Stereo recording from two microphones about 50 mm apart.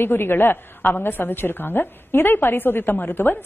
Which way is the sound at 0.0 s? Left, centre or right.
Left.